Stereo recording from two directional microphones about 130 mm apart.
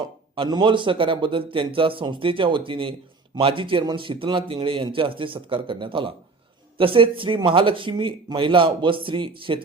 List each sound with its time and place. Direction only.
0.0 s a man's voice: 35° right (ahead or behind)